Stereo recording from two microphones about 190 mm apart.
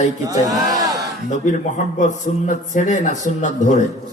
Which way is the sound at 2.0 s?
40° left (ahead or behind).